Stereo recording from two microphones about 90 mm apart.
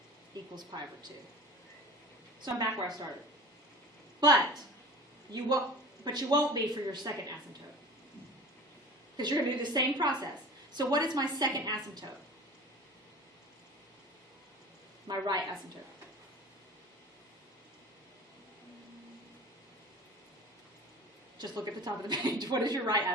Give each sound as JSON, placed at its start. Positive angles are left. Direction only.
{"t": 0.5, "sound": "a woman's voice", "side_deg": -50}
{"t": 2.4, "sound": "a woman's voice", "side_deg": -50}
{"t": 5.3, "sound": "a woman's voice", "side_deg": -45}
{"t": 9.1, "sound": "a woman's voice", "side_deg": -50}
{"t": 15.0, "sound": "a woman's voice", "side_deg": -50}
{"t": 21.3, "sound": "a woman's voice", "side_deg": -50}